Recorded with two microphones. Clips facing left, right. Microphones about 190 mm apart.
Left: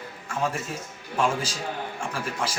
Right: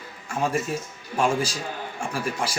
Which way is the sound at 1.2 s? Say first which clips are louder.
Right 2 dB; 10° right (ahead or behind).